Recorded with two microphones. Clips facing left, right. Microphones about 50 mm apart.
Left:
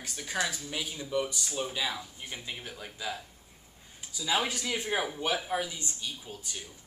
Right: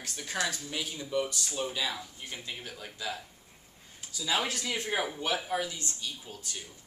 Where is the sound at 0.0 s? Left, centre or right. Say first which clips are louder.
Left 1 dB; centre.